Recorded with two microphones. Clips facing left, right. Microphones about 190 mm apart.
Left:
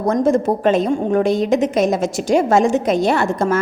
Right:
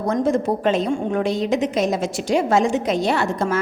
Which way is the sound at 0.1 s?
45° left (ahead or behind).